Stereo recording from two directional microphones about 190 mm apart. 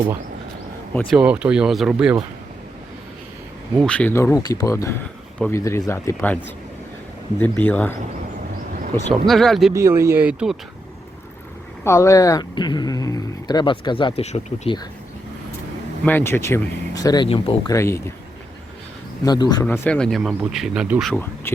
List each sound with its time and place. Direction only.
1.1 s speech: 5° right (ahead or behind)
3.8 s speech: 5° left (ahead or behind)
9.0 s speech: centre (ahead or behind)
9.7 s speech: 15° right (ahead or behind)
11.8 s speech: 15° left (ahead or behind); by 14.8 s 35° left (ahead or behind)
16.0 s speech: 10° left (ahead or behind)
17.2 s speech: 30° left (ahead or behind)
17.7 s speech: 15° left (ahead or behind)
19.2 s speech: 20° left (ahead or behind)
19.6 s speech: 10° left (ahead or behind); by 21.1 s 5° right (ahead or behind)
21.1 s speech: 10° left (ahead or behind)